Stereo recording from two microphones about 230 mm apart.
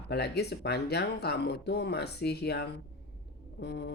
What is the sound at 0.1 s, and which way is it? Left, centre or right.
Speech, left.